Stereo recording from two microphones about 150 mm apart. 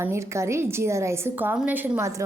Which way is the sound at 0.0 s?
15° right (ahead or behind).